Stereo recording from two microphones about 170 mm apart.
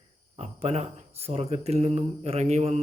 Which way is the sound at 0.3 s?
40° right (ahead or behind).